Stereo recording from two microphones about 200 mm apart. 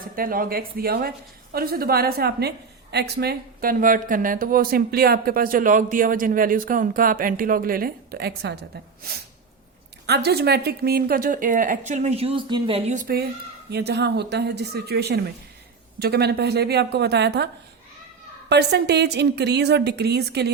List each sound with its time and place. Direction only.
0.2 s speech: 45° right (ahead or behind)
10.1 s speech: 55° right (ahead or behind)
13.7 s a woman's voice: 55° right (ahead or behind)